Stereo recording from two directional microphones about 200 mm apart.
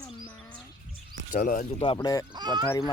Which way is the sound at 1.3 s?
45° left (ahead or behind).